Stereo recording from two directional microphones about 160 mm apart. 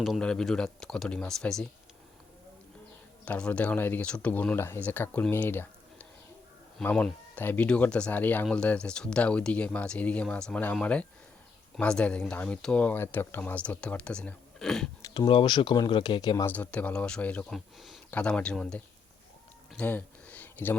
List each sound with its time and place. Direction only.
0.0 s speech: centre (ahead or behind)
3.2 s speech: 5° left (ahead or behind)
15.0 s speech: 30° left (ahead or behind)
16.5 s speech: 10° left (ahead or behind)
19.7 s a sound: 10° left (ahead or behind)